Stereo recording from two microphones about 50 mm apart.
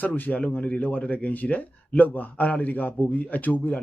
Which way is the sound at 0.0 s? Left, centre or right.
Left.